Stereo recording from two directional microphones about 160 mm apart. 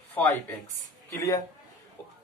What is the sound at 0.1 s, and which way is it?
Speech, 10° left (ahead or behind).